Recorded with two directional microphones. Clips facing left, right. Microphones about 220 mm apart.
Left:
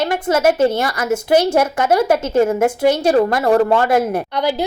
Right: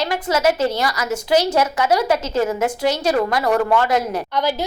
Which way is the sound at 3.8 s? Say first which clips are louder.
Left 4 dB; 50° left (ahead or behind).